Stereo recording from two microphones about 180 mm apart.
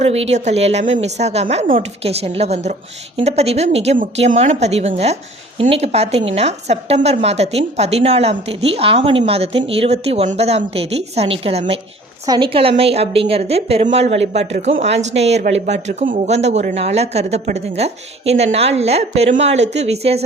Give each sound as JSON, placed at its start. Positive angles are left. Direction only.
{"t": 0.0, "sound": "a woman's voice", "side_deg": -35}